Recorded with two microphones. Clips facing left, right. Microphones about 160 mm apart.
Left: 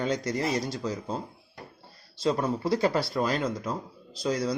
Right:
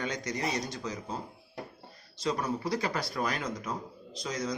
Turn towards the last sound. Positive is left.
turn(degrees=35)  # may be behind; listen again after turning